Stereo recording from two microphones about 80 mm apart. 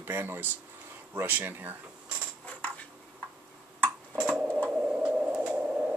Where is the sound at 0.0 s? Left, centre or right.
Right.